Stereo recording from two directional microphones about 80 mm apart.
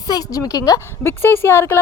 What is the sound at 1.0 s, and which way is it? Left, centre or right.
Speech, left.